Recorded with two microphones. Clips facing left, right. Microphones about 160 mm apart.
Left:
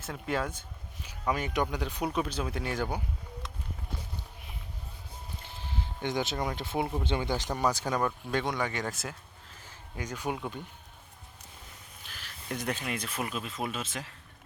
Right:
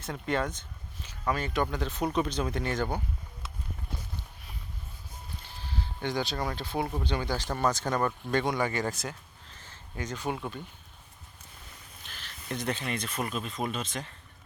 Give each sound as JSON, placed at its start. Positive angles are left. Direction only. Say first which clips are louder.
{"t": 0.0, "sound": "speech", "louder": "right 2 dB", "side_deg": 5}
{"t": 5.5, "sound": "speech", "louder": "even", "side_deg": 20}
{"t": 12.0, "sound": "speech", "louder": "even", "side_deg": 5}